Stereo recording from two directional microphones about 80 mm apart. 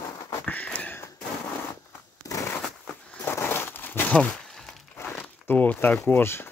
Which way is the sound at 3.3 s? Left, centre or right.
Left.